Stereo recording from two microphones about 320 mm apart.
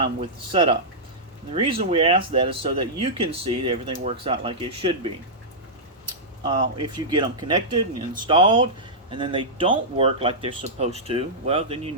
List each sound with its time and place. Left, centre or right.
0.0 s speech: centre
6.4 s speech: centre